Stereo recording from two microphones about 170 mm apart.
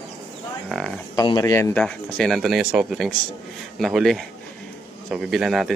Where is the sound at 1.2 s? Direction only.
20° left (ahead or behind).